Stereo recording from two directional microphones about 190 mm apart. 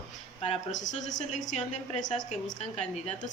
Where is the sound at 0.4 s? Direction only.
35° left (ahead or behind).